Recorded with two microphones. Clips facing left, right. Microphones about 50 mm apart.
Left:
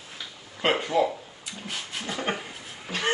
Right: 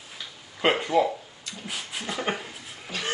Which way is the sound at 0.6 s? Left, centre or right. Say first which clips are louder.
Right 1 dB; centre.